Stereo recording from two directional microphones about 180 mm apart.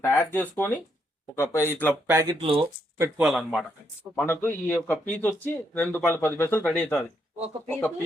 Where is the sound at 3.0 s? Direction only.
5° right (ahead or behind).